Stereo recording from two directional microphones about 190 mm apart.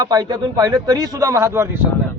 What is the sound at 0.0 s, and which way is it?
Speech, 20° right (ahead or behind).